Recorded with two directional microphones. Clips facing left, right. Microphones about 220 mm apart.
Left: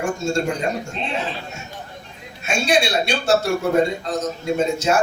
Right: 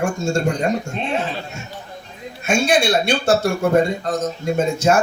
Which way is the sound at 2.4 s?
50° right (ahead or behind).